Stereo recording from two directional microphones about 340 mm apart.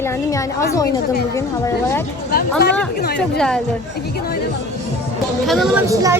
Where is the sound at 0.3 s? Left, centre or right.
Centre.